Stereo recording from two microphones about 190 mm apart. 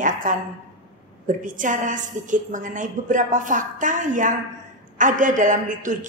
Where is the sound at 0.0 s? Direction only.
45° right (ahead or behind).